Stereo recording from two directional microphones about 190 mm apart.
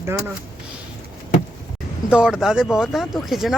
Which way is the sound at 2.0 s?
5° right (ahead or behind).